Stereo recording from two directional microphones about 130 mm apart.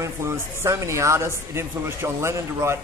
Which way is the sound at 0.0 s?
20° right (ahead or behind).